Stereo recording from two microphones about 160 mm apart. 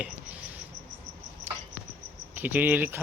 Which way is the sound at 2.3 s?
10° right (ahead or behind).